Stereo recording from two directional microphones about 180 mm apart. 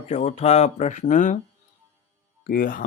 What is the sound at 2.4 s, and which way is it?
Speech, 50° left (ahead or behind).